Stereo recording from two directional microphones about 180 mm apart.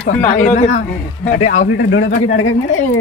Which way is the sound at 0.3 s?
40° left (ahead or behind).